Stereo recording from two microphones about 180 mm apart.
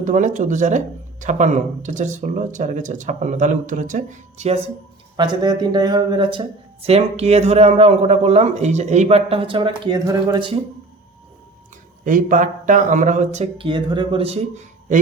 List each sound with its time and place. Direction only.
0.0 s speech: 45° right (ahead or behind)
5.1 s speech: 25° right (ahead or behind)
12.0 s speech: 45° right (ahead or behind)